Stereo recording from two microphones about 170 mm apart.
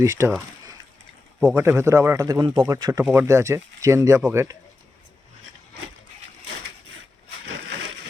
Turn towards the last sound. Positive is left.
turn(degrees=-90)